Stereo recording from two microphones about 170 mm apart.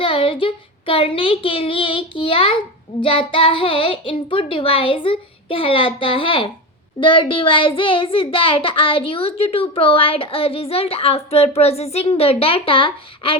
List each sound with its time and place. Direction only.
0.0 s a child's voice: 30° left (ahead or behind)